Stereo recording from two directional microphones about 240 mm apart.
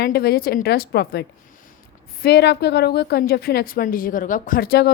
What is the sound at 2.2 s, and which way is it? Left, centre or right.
A woman's voice, left.